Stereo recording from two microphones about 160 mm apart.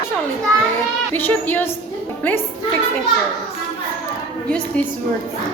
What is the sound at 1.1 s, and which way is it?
Speech, 10° left (ahead or behind).